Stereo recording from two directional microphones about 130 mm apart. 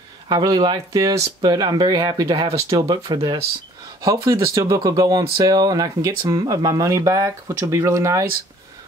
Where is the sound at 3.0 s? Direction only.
40° right (ahead or behind).